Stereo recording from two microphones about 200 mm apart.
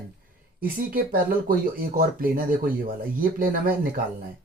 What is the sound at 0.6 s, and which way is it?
Speech, 45° right (ahead or behind).